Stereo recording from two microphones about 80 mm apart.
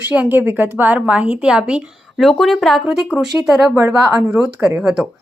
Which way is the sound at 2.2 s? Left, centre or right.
Centre.